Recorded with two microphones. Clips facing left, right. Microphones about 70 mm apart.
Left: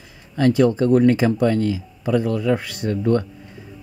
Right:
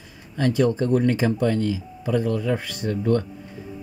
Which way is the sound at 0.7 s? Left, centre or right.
Left.